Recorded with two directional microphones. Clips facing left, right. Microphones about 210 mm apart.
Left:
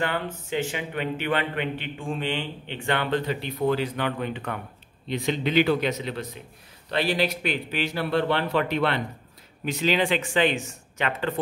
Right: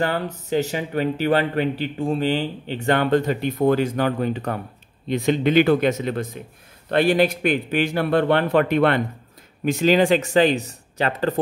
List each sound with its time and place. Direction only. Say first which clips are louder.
0.0 s a man's voice: right 4 dB; 40° right (ahead or behind)